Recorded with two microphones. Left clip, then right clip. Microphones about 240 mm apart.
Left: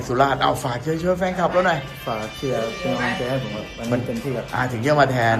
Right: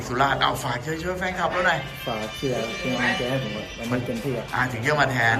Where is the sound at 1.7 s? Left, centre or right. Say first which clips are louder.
Left 2 dB; centre.